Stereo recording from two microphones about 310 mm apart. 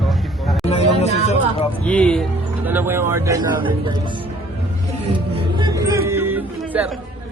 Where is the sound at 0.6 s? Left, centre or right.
Left.